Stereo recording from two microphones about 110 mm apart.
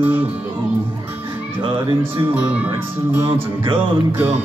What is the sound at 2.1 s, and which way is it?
Speech, 20° right (ahead or behind).